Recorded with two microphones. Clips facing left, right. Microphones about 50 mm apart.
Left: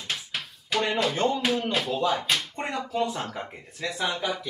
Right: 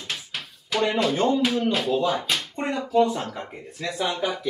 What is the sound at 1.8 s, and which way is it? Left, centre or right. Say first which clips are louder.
Speech: right 2 dB; centre.